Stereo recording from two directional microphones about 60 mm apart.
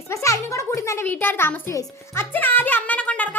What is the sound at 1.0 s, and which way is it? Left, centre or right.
Speech, left.